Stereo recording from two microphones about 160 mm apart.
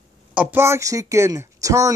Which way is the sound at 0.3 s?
10° right (ahead or behind).